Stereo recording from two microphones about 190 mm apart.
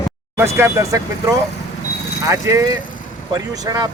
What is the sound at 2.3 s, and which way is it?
Speech, 15° right (ahead or behind).